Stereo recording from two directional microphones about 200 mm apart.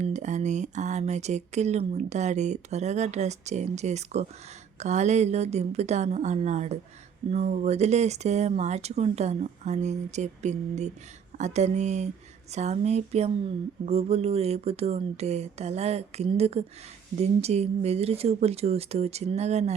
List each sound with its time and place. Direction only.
0.0 s speech: 35° right (ahead or behind)